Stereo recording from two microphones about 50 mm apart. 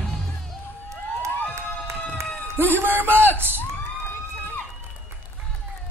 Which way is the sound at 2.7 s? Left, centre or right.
Right.